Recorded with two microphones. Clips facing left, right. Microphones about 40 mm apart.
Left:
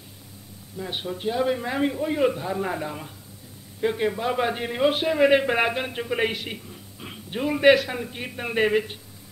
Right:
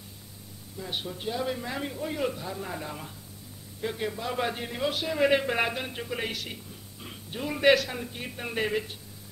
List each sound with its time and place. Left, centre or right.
0.7 s a man's voice: centre
2.8 s a man's voice: centre
3.8 s a man's voice: left
5.1 s a man's voice: centre
7.5 s a man's voice: centre